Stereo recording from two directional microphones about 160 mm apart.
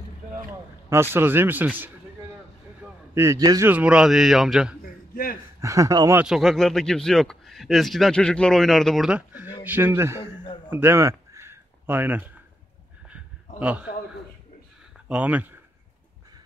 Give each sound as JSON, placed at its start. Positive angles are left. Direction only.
{"t": 0.5, "sound": "a sound", "side_deg": -15}
{"t": 1.1, "sound": "speech", "side_deg": -15}
{"t": 3.2, "sound": "a man's voice", "side_deg": -20}
{"t": 3.7, "sound": "a man's voice", "side_deg": -5}
{"t": 5.1, "sound": "speech", "side_deg": 65}
{"t": 5.6, "sound": "a man's voice", "side_deg": -20}
{"t": 6.1, "sound": "a man's voice", "side_deg": -5}
{"t": 10.7, "sound": "a sound", "side_deg": -15}
{"t": 13.6, "sound": "a man's voice", "side_deg": -5}
{"t": 15.0, "sound": "speech", "side_deg": -10}